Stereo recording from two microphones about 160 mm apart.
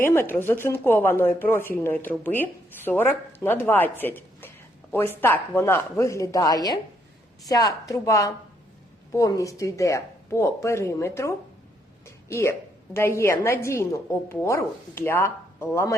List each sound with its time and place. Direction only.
0.0 s speech: 15° left (ahead or behind)